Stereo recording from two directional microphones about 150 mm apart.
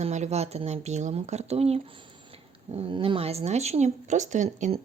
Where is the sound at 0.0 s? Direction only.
50° right (ahead or behind).